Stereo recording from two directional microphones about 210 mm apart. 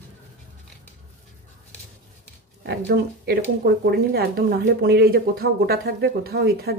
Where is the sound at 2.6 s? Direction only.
50° right (ahead or behind).